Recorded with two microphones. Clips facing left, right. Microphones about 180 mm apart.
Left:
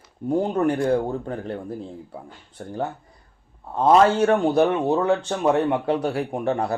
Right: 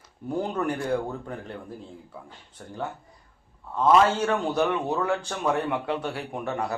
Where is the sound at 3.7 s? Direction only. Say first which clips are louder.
Left 4 dB; 35° left (ahead or behind).